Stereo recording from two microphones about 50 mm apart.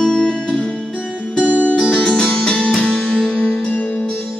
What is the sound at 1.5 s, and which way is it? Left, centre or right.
Music, left.